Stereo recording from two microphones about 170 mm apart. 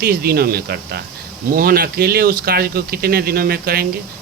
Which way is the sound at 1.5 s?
60° right (ahead or behind).